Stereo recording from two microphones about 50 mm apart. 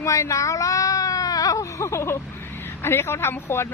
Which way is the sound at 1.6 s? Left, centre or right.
Left.